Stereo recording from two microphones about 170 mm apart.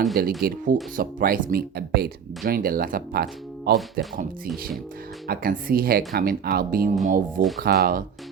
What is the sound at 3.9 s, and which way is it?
Speech, 55° right (ahead or behind).